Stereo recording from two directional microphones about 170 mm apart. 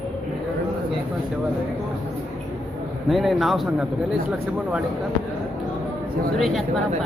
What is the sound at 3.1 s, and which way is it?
Speech, centre (ahead or behind).